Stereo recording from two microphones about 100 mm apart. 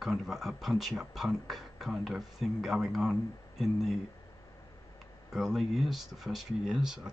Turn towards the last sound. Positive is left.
turn(degrees=-5)  # may be behind; listen again after turning